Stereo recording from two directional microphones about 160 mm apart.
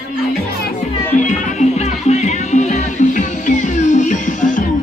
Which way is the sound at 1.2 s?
50° left (ahead or behind).